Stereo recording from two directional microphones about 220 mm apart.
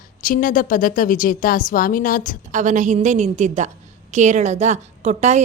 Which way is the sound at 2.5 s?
35° right (ahead or behind).